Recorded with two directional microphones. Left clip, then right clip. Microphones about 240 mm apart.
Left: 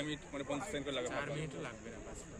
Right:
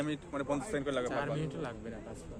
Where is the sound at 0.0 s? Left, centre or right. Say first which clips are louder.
Right 5 dB; right.